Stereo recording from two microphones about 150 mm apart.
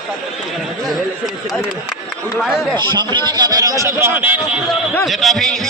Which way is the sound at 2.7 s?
30° right (ahead or behind).